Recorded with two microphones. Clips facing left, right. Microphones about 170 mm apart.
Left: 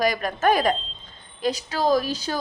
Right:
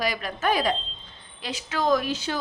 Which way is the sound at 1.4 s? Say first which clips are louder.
Left 3 dB; 35° left (ahead or behind).